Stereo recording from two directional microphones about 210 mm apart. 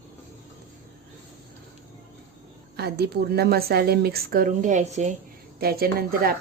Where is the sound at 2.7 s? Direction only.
50° right (ahead or behind); by 5.1 s 35° right (ahead or behind).